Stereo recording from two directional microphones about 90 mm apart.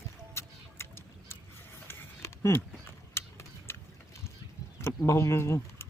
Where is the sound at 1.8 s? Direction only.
30° left (ahead or behind).